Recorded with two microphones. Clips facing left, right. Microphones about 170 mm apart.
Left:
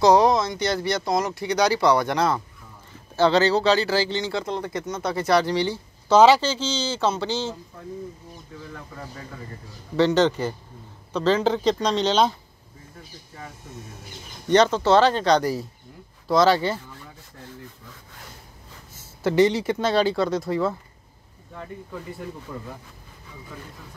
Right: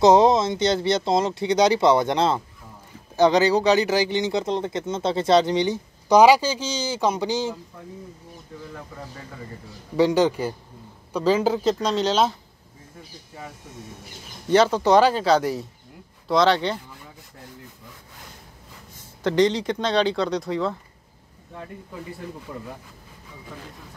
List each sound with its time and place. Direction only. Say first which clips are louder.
0.0 s speech: right 2 dB; 25° right (ahead or behind)
9.9 s speech: even; 10° right (ahead or behind)
14.5 s speech: even; 10° right (ahead or behind)
19.2 s speech: left 1 dB; 10° left (ahead or behind)